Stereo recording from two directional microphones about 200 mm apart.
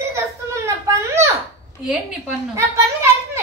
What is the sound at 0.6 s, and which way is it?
Children playing, 15° right (ahead or behind).